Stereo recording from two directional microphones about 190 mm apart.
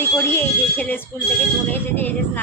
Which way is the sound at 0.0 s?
10° left (ahead or behind).